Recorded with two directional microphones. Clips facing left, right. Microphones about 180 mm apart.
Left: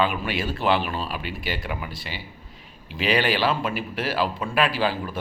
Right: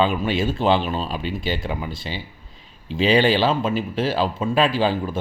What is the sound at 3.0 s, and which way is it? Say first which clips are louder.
A man's voice: right 5 dB; 25° right (ahead or behind).